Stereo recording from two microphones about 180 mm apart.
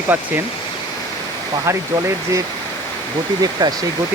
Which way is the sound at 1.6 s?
15° right (ahead or behind).